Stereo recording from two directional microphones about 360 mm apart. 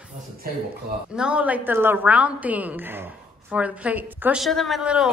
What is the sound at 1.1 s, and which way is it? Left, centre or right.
A woman's voice, centre.